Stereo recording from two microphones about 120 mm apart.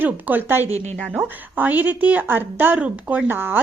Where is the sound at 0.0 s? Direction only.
15° right (ahead or behind).